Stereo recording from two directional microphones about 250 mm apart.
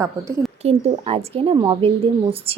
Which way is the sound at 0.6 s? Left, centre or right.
Right.